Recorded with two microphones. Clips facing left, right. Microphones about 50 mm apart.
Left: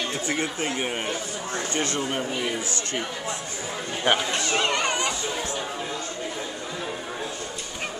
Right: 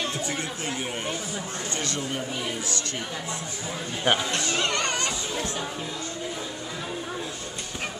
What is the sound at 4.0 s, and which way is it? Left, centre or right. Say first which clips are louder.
Speech: left 1 dB; centre.